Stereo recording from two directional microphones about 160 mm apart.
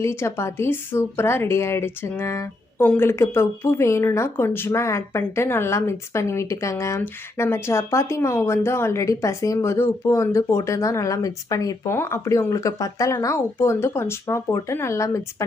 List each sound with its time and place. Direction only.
0.0 s speech: 15° left (ahead or behind)